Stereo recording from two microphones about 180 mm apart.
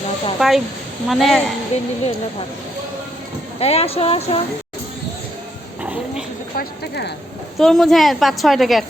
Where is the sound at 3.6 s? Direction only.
35° left (ahead or behind).